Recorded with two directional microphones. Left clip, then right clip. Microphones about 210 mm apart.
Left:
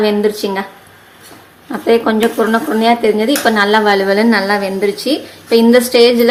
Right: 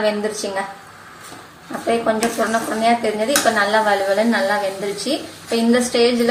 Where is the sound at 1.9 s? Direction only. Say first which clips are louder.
Left 6 dB; 50° left (ahead or behind).